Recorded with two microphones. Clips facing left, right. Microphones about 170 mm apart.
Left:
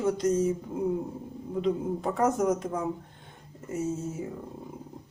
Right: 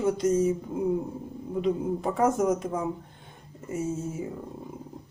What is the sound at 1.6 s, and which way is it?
Speech, 10° right (ahead or behind).